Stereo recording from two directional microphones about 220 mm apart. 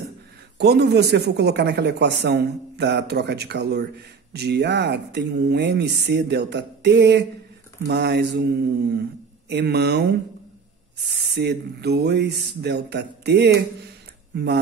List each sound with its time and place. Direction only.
0.6 s speech: 50° right (ahead or behind)
9.5 s speech: 50° right (ahead or behind)
11.2 s speech: 50° right (ahead or behind)